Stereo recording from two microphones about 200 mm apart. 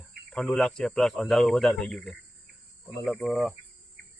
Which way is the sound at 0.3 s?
Centre (ahead or behind).